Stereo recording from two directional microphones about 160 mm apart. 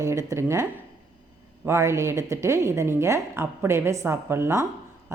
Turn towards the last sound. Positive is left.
turn(degrees=-15)  # may be behind; listen again after turning